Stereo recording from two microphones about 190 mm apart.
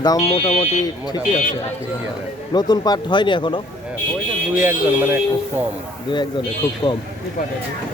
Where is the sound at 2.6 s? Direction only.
20° left (ahead or behind).